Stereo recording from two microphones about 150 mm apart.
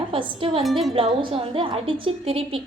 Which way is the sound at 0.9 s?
40° right (ahead or behind).